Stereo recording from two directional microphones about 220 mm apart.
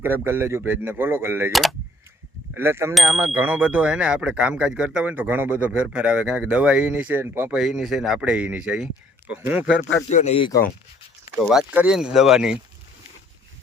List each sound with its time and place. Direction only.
0.0 s speech: 10° right (ahead or behind)
2.6 s speech: 10° right (ahead or behind)
10.1 s speech: 30° left (ahead or behind)
11.3 s speech: centre (ahead or behind)